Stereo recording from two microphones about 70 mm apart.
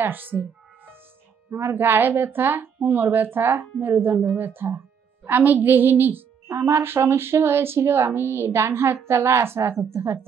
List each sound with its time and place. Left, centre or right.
0.0 s music: right
1.5 s a woman's voice: right